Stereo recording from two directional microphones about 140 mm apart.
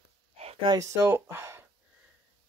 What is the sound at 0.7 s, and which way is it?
Speech, 20° right (ahead or behind).